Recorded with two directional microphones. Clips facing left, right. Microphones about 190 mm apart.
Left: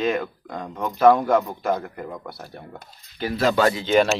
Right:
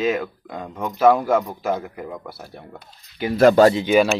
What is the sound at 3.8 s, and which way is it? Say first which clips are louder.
Speech: right 2 dB; 10° right (ahead or behind).